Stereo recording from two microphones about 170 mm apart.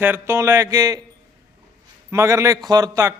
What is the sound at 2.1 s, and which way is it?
A man's voice, 15° right (ahead or behind).